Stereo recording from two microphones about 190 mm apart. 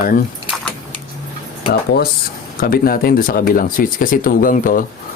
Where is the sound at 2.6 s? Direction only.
50° left (ahead or behind).